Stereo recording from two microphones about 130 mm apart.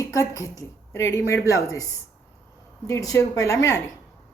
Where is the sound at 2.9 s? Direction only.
25° left (ahead or behind).